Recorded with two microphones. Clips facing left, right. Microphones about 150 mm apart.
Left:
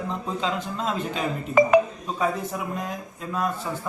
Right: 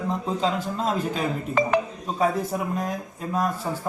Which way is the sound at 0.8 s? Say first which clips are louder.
Right 2 dB; 40° right (ahead or behind).